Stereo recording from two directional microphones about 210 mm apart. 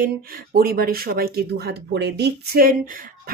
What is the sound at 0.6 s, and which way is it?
Speech, 45° right (ahead or behind).